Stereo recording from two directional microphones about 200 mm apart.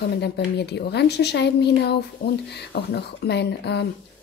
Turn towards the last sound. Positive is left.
turn(degrees=55)  # may be behind; listen again after turning